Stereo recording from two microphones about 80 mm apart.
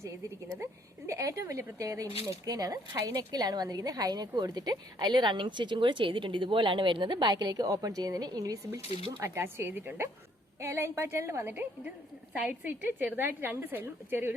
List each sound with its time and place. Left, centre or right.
0.6 s speech: right
9.2 s a woman's voice: right
12.3 s a woman's voice: centre